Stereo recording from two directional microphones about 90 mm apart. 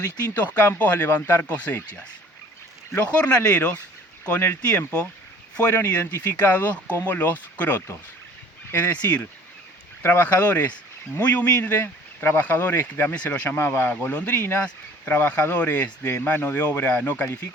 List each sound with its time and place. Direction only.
0.3 s speech: 20° left (ahead or behind)
10.0 s speech: 25° left (ahead or behind)